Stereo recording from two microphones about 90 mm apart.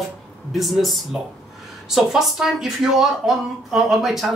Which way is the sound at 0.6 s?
Centre (ahead or behind).